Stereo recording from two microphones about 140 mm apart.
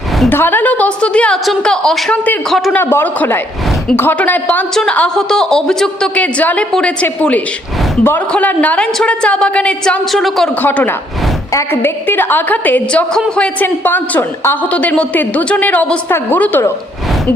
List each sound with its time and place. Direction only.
0.3 s a woman's voice: 15° left (ahead or behind)
2.7 s a woman's voice: 15° left (ahead or behind)